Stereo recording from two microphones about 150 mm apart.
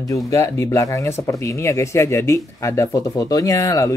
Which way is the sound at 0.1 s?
20° left (ahead or behind).